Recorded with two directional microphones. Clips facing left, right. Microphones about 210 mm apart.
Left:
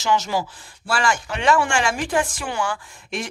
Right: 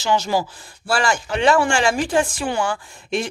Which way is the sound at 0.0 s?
35° right (ahead or behind).